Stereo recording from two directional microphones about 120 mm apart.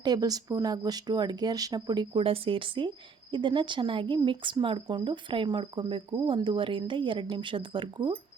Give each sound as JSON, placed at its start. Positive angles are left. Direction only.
{"t": 0.0, "sound": "speech", "side_deg": -35}
{"t": 2.2, "sound": "speech", "side_deg": -50}